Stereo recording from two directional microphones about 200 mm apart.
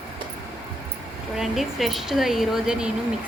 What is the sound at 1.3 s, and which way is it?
Speech, centre (ahead or behind).